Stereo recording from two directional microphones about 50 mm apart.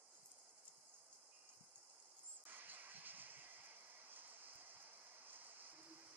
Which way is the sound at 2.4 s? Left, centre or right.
Right.